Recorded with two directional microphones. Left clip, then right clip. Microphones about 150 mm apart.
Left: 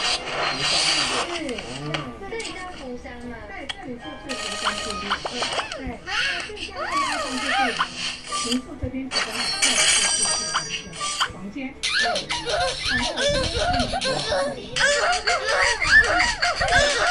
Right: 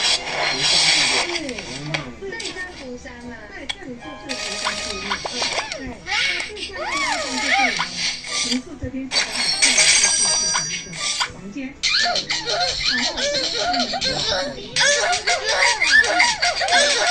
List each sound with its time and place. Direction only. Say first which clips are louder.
0.0 s music: right 4 dB; 10° right (ahead or behind)
4.3 s music: right 1 dB; 5° right (ahead or behind)
9.1 s a sound: right 4 dB; 5° right (ahead or behind)
11.0 s music: right 2 dB; 10° right (ahead or behind)
11.8 s music: right 3 dB; 20° left (ahead or behind)
14.8 s fowl: right 2 dB; 5° right (ahead or behind)